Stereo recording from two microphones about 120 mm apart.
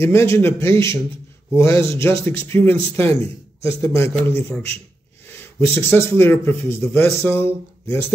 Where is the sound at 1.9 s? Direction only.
20° left (ahead or behind).